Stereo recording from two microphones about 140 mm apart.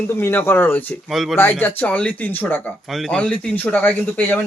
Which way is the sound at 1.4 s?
15° left (ahead or behind).